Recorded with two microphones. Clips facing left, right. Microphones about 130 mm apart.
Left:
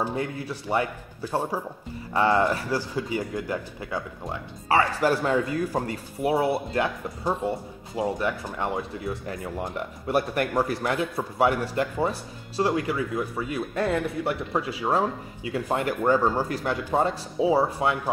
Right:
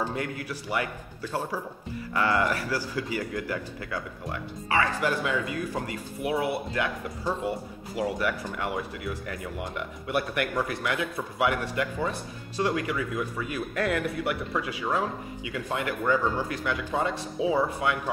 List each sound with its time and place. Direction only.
0.0 s speech: 25° left (ahead or behind)
4.6 s speech: 35° left (ahead or behind)
8.2 s speech: 25° left (ahead or behind)